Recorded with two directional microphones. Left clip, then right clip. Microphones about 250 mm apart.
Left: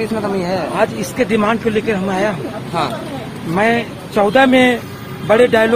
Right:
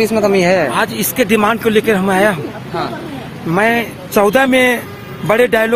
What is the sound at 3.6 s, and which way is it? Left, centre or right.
Speech, right.